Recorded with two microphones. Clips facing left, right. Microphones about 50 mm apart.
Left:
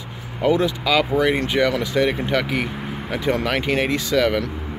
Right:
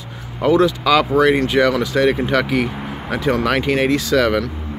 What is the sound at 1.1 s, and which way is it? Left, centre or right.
Speech, right.